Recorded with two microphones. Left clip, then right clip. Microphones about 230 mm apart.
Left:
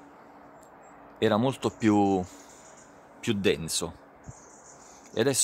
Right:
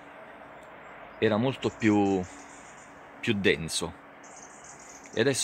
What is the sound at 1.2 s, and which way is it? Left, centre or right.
Speech, centre.